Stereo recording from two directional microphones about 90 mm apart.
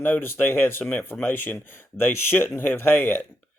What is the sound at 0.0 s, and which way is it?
Speech, 20° left (ahead or behind).